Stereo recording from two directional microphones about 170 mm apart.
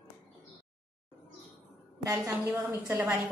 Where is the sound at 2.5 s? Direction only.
15° right (ahead or behind).